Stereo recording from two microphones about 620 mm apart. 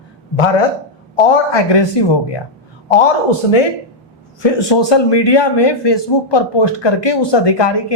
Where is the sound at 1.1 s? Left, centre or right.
Left.